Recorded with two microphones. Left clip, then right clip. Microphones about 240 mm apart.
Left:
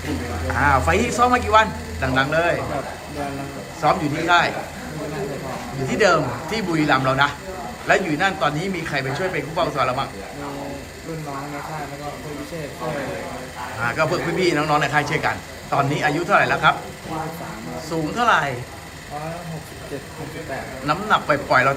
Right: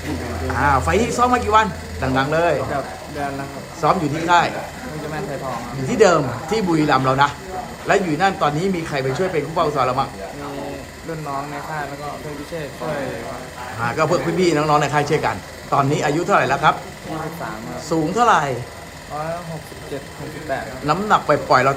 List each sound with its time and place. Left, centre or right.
0.6 s a man's voice: centre
3.8 s a man's voice: centre
5.9 s a man's voice: centre
13.8 s a man's voice: centre
17.8 s a man's voice: centre
20.8 s a man's voice: centre